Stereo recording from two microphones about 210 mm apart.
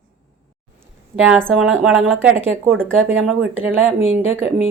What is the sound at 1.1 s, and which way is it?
A woman's voice, 5° right (ahead or behind).